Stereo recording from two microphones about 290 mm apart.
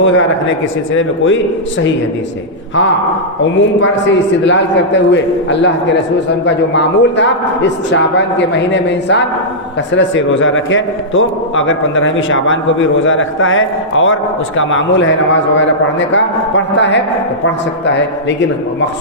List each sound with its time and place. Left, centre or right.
0.0 s a man's voice: left
3.8 s a man's voice: left